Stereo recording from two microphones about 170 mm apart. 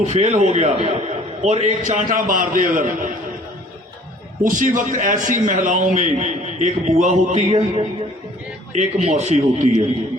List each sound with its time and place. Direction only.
0.0 s a man's voice: 40° right (ahead or behind)
4.4 s a man's voice: 50° right (ahead or behind)
8.7 s a man's voice: 45° right (ahead or behind)